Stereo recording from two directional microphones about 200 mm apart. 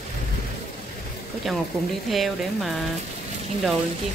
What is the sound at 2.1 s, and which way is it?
Speech, centre (ahead or behind).